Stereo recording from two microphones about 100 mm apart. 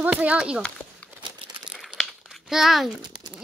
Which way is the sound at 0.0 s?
15° right (ahead or behind).